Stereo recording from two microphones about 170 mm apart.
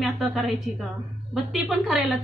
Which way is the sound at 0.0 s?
Centre (ahead or behind).